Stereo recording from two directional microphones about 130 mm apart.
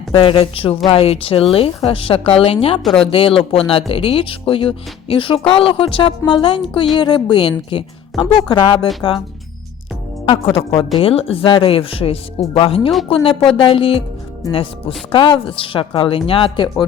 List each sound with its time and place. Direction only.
0.1 s speech: 45° left (ahead or behind)
2.8 s speech: 5° left (ahead or behind)
3.1 s a woman's voice: 45° left (ahead or behind)
8.1 s speech: centre (ahead or behind)
8.4 s a woman's voice: 35° left (ahead or behind)
10.9 s a woman's voice: 45° left (ahead or behind)